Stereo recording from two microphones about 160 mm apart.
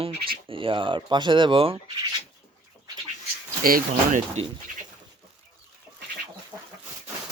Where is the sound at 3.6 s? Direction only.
65° right (ahead or behind).